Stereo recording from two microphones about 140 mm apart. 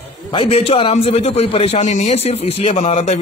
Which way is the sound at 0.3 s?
40° left (ahead or behind).